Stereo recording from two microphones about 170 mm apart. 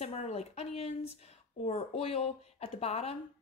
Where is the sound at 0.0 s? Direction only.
35° left (ahead or behind).